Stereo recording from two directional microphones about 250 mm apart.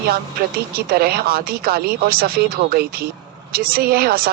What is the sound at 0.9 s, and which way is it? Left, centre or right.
Speech, right.